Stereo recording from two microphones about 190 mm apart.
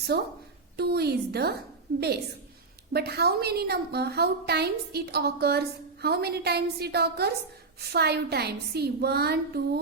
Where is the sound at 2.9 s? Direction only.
55° right (ahead or behind).